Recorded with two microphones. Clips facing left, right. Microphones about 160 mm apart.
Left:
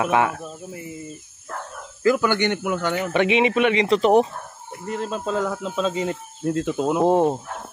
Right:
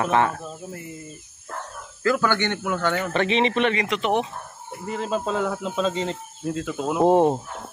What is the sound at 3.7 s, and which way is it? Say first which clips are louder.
Speech: left 7 dB; 30° left (ahead or behind).